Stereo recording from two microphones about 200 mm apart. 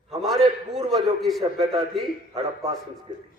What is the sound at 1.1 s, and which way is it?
Speech, centre (ahead or behind).